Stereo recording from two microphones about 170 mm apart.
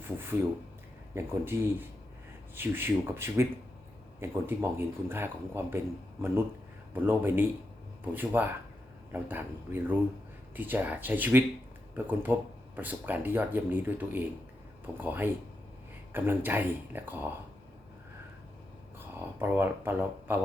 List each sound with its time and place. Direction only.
0.0 s speech: 15° right (ahead or behind)
6.9 s speech: 10° right (ahead or behind)
18.9 s speech: 15° right (ahead or behind)